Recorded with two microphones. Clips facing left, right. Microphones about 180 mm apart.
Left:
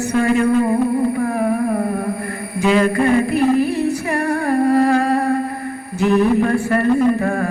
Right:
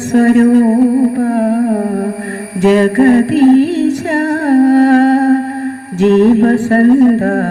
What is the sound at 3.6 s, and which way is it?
Singing, 80° right.